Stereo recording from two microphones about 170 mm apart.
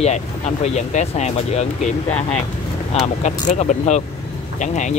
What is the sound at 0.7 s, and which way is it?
Speech, 40° left (ahead or behind).